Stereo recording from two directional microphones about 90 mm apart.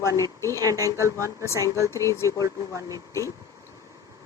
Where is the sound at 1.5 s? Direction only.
30° left (ahead or behind).